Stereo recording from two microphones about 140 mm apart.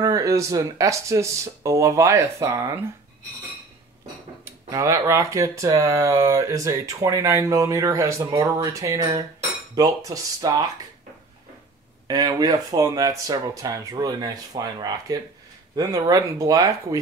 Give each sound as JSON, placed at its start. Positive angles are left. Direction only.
{"t": 0.0, "sound": "speech", "side_deg": -25}
{"t": 4.6, "sound": "speech", "side_deg": -25}
{"t": 12.1, "sound": "speech", "side_deg": -30}